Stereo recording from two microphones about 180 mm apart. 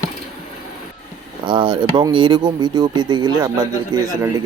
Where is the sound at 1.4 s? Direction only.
25° right (ahead or behind).